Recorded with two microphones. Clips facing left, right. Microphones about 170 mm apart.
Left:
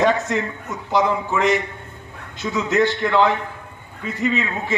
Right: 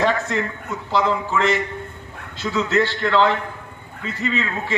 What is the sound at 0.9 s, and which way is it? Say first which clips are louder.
A man's voice: left 1 dB; 15° left (ahead or behind).